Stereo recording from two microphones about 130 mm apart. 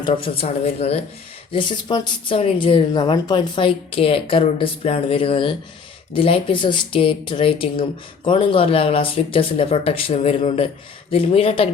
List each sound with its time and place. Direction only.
0.0 s speech: 45° left (ahead or behind)
1.5 s speech: 35° left (ahead or behind)